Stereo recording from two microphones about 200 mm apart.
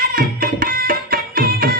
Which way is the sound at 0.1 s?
45° right (ahead or behind).